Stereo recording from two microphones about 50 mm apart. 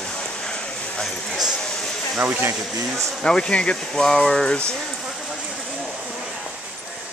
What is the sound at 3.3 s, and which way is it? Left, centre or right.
Speech, centre.